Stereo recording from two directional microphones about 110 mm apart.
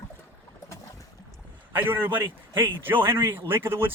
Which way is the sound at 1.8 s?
20° right (ahead or behind).